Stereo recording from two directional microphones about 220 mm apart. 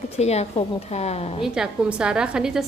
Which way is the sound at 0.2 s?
30° left (ahead or behind).